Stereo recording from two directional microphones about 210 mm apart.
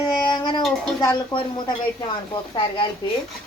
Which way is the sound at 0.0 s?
20° left (ahead or behind).